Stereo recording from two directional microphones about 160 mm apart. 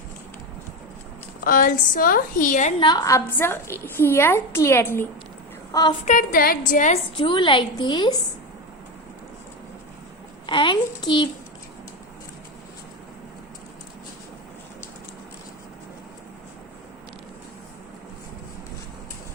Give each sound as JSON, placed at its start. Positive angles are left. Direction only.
{"t": 1.5, "sound": "a woman's voice", "side_deg": 60}
{"t": 2.8, "sound": "a woman's voice", "side_deg": 25}
{"t": 6.1, "sound": "a woman's voice", "side_deg": 60}
{"t": 7.2, "sound": "a woman's voice", "side_deg": 30}
{"t": 10.4, "sound": "a child's voice", "side_deg": 30}